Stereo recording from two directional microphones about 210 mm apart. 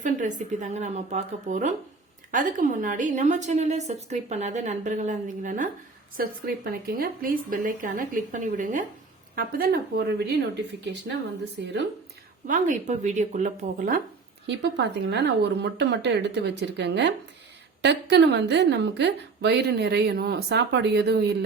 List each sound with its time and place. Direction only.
0.0 s a woman's voice: 35° right (ahead or behind)
11.5 s speech: 55° right (ahead or behind)
12.5 s a woman's voice: 40° right (ahead or behind)
14.4 s a woman's voice: 55° right (ahead or behind)